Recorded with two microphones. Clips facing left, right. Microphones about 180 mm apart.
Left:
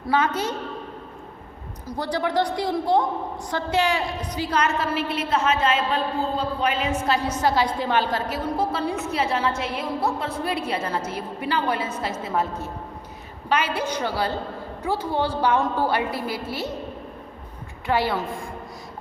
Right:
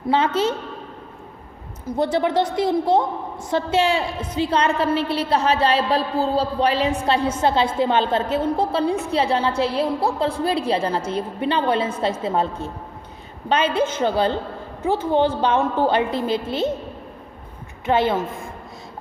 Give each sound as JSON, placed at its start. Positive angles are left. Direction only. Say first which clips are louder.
{"t": 0.1, "sound": "a woman's voice", "louder": "right 4 dB", "side_deg": -25}
{"t": 1.9, "sound": "a woman's voice", "louder": "right 5 dB", "side_deg": -25}
{"t": 15.4, "sound": "a woman's voice", "louder": "right 2 dB", "side_deg": -25}
{"t": 17.8, "sound": "a woman's voice", "louder": "right 4 dB", "side_deg": -20}